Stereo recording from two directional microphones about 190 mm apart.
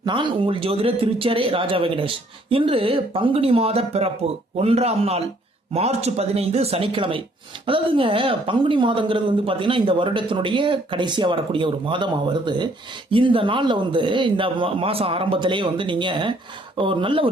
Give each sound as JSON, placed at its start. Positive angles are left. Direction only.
{"t": 0.0, "sound": "speech", "side_deg": -25}